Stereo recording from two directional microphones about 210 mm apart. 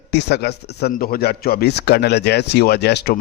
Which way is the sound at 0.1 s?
55° left (ahead or behind).